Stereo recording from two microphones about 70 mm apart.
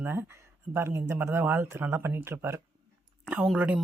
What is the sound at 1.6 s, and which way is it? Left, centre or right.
Speech, right.